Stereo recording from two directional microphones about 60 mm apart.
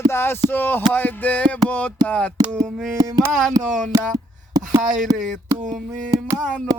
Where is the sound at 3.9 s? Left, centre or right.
Right.